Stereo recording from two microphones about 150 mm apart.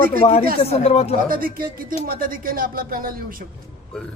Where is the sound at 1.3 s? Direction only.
75° right (ahead or behind).